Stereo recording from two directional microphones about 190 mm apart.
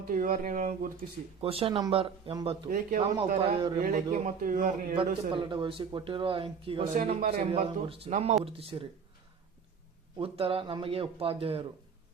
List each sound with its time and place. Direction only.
0.1 s a man's voice: 45° right (ahead or behind)
1.4 s speech: 30° right (ahead or behind)
2.6 s a man's voice: 45° right (ahead or behind)
3.3 s speech: 25° right (ahead or behind)
3.8 s a man's voice: 45° right (ahead or behind)
4.9 s speech: 25° right (ahead or behind)
6.9 s speech: 45° right (ahead or behind)
10.2 s speech: 30° right (ahead or behind)